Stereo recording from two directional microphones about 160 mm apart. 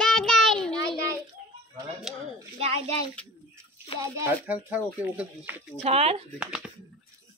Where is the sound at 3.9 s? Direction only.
15° right (ahead or behind).